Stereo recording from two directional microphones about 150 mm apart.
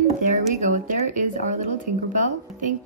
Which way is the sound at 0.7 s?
60° right (ahead or behind).